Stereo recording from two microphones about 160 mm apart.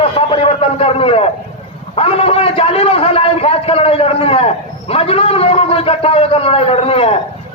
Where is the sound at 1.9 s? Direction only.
40° left (ahead or behind).